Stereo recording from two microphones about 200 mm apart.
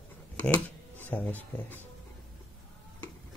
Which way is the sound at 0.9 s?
10° left (ahead or behind).